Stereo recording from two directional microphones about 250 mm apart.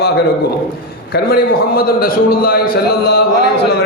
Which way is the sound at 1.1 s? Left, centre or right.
Left.